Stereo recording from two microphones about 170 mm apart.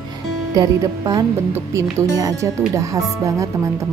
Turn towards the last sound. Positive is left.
turn(degrees=-20)  # may be behind; listen again after turning